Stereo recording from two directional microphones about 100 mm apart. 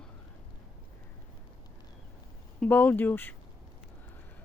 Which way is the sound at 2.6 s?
15° left (ahead or behind).